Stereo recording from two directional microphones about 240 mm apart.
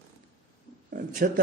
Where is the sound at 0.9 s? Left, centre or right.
Right.